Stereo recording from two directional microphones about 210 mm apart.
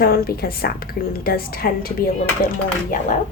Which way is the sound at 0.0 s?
45° left (ahead or behind).